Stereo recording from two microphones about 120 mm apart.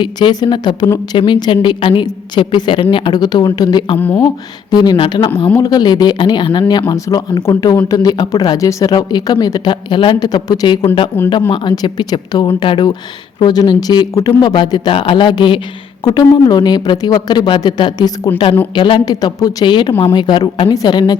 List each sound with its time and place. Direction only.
0.0 s a woman's voice: 40° left (ahead or behind)
3.9 s speech: 15° left (ahead or behind)
4.7 s speech: 35° left (ahead or behind)
10.8 s a woman's voice: 45° left (ahead or behind); by 19.6 s 30° left (ahead or behind)
19.6 s speech: 40° left (ahead or behind)